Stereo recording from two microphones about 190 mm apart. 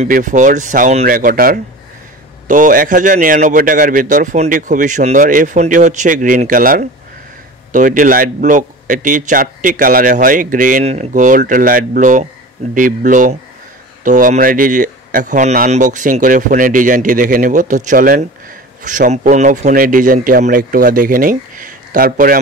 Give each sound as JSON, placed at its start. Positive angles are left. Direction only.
{"t": 0.1, "sound": "speech", "side_deg": -40}